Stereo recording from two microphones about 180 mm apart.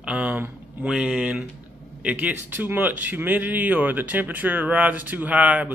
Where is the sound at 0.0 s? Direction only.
5° right (ahead or behind).